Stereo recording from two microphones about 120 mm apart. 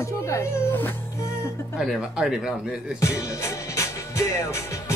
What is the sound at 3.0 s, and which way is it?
Music, 25° left (ahead or behind).